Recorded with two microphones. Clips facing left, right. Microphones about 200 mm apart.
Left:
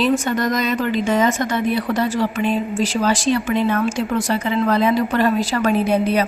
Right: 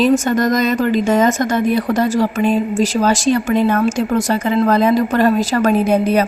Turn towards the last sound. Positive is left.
turn(degrees=-45)  # may be behind; listen again after turning